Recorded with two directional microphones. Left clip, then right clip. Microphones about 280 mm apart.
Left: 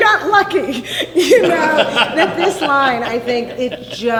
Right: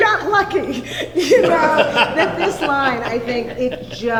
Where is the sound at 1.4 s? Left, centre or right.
Centre.